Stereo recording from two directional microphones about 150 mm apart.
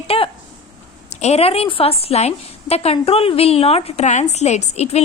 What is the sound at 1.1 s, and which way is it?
A woman's voice, 45° left (ahead or behind).